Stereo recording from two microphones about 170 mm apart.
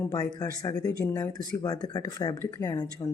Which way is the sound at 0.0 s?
20° left (ahead or behind).